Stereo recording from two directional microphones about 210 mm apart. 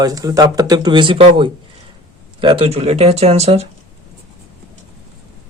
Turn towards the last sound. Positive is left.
turn(degrees=-30)  # may be behind; listen again after turning